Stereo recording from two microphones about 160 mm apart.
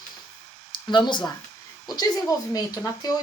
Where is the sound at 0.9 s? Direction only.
30° left (ahead or behind).